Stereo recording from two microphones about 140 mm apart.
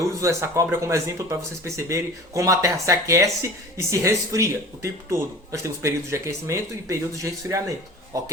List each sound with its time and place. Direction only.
0.0 s speech: 20° right (ahead or behind)